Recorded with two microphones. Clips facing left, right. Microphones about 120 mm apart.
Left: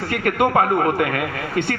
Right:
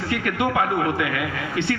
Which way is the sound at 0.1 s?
50° left (ahead or behind).